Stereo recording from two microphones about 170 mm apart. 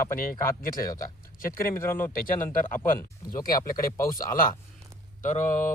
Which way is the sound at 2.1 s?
55° left (ahead or behind).